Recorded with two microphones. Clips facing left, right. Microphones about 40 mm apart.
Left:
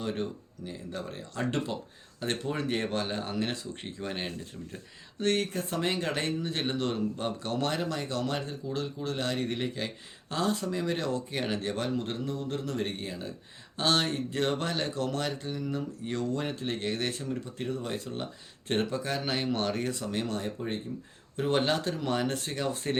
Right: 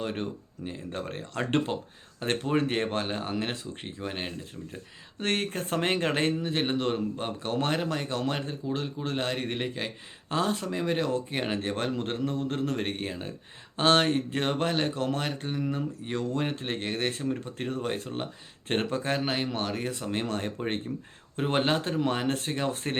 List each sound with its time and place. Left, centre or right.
0.0 s a man's voice: right; by 4.8 s centre
5.2 s speech: right
6.4 s a man's voice: right
11.8 s a man's voice: right
19.2 s speech: centre
19.8 s a man's voice: right
20.2 s speech: right
20.9 s speech: right
21.3 s a man's voice: right